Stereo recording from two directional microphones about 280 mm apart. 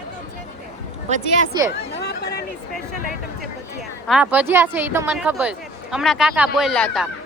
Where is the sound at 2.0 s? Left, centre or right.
Left.